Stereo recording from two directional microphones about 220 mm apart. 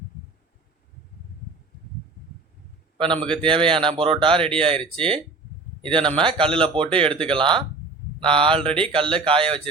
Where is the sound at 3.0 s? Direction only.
25° right (ahead or behind).